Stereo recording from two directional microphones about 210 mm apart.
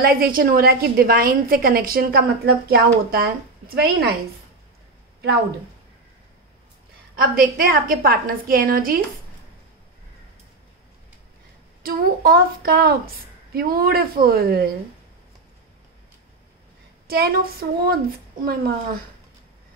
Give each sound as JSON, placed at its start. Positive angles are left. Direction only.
{"t": 0.0, "sound": "a woman's voice", "side_deg": -45}
{"t": 7.2, "sound": "a woman's voice", "side_deg": -45}
{"t": 11.8, "sound": "a woman's voice", "side_deg": -45}
{"t": 17.1, "sound": "a woman's voice", "side_deg": -45}